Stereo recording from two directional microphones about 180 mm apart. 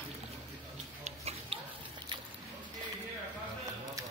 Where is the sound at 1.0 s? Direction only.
35° right (ahead or behind).